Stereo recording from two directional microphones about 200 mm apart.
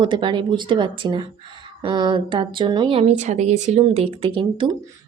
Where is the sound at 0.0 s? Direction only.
25° right (ahead or behind).